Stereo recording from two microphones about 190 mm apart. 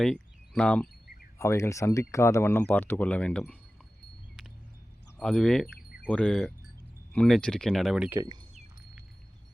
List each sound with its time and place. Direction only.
0.0 s speech: 5° left (ahead or behind)
5.2 s speech: 5° left (ahead or behind)
8.2 s speech: 25° right (ahead or behind)